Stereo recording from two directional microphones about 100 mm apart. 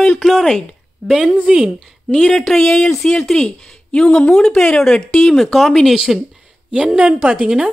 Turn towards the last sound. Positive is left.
turn(degrees=-10)  # may be behind; listen again after turning